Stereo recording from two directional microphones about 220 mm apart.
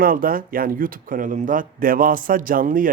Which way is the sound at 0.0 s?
40° right (ahead or behind).